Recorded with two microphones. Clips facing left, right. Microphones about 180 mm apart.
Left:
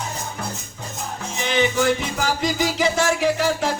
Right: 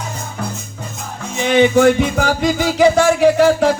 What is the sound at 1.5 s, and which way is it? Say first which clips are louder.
Music: right 9 dB; 50° right (ahead or behind).